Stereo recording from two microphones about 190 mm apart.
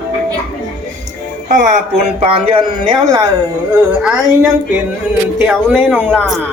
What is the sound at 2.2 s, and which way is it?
A man's voice, 30° right (ahead or behind).